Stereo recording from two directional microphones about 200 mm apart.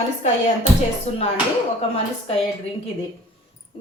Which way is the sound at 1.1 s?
35° left (ahead or behind).